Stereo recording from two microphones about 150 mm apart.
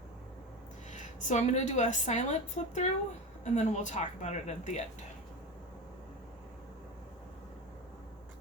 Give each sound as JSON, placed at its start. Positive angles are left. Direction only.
{"t": 0.9, "sound": "a woman's voice", "side_deg": 55}